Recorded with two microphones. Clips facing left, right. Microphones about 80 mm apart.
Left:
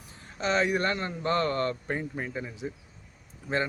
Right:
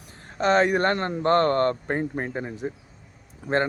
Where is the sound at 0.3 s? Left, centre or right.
Right.